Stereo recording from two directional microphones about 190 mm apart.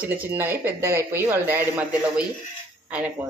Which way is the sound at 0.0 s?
10° right (ahead or behind).